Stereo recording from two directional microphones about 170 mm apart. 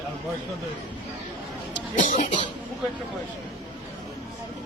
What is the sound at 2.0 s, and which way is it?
Speech, 50° left (ahead or behind).